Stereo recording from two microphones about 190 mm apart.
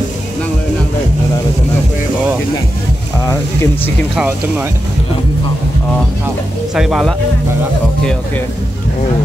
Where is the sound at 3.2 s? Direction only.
15° left (ahead or behind).